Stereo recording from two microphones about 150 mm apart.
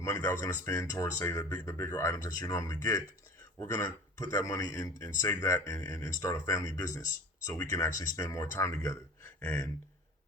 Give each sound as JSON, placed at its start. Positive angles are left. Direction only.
{"t": 0.0, "sound": "speech", "side_deg": 15}
{"t": 7.5, "sound": "speech", "side_deg": 10}